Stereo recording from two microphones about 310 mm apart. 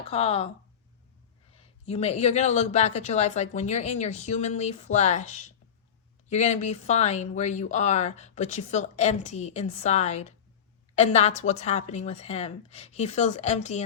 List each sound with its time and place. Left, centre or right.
0.1 s speech: centre
1.5 s speech: left